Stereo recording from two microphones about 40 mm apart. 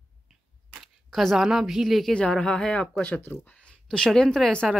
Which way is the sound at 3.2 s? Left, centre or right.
Left.